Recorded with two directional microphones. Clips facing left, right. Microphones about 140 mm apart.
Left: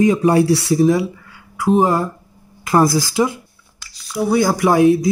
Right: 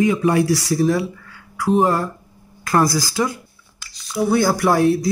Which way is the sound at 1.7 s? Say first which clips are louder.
Left 2 dB; centre (ahead or behind).